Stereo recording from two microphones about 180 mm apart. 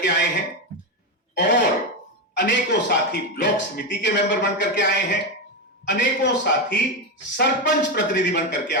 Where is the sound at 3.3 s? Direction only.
65° left (ahead or behind).